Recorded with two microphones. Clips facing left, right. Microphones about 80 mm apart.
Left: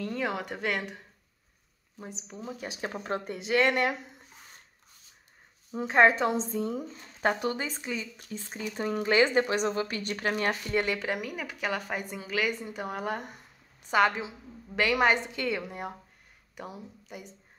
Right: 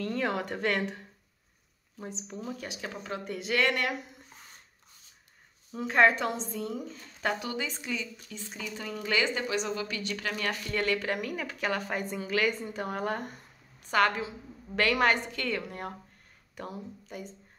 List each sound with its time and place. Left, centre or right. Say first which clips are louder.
0.0 s a woman's voice: right 1 dB; centre
2.0 s a woman's voice: right 2 dB; centre
2.7 s speech: left 4 dB; left
5.8 s speech: left 2 dB; left
7.3 s speech: left 3 dB; left; by 13.2 s centre
13.8 s a woman's voice: left 1 dB; centre